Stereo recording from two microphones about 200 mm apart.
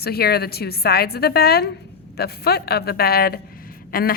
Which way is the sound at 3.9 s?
45° left (ahead or behind).